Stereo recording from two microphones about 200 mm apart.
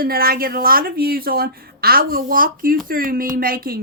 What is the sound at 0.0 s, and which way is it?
Speech, 50° right (ahead or behind).